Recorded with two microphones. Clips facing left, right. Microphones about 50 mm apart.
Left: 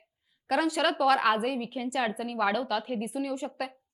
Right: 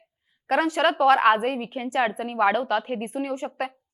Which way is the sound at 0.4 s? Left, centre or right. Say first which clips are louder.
Right 5 dB; right.